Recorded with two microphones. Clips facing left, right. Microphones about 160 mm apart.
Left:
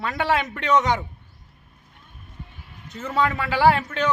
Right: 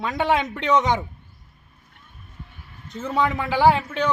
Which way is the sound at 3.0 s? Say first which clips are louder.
Right 1 dB; 15° right (ahead or behind).